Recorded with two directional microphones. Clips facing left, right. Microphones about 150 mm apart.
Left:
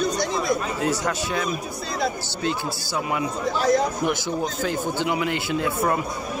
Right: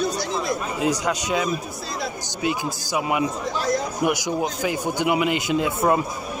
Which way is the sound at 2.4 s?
15° right (ahead or behind).